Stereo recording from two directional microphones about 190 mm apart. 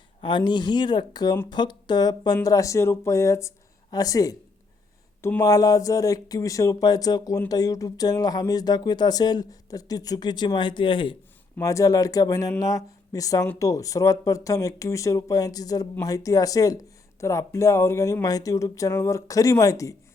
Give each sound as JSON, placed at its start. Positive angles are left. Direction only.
{"t": 0.2, "sound": "speech", "side_deg": 25}